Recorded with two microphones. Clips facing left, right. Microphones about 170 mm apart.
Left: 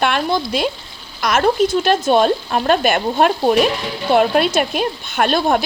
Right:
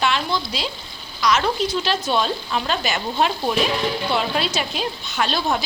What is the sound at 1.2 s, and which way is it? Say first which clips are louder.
Speech: left 5 dB; 50° left (ahead or behind).